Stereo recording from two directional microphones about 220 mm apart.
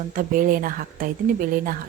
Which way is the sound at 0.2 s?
40° right (ahead or behind).